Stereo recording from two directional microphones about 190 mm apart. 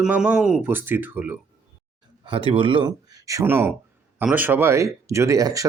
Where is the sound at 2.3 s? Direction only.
30° right (ahead or behind).